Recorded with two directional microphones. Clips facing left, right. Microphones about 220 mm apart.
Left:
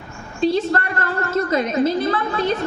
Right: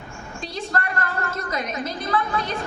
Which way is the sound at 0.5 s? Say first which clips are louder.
Left 7 dB; 30° left (ahead or behind).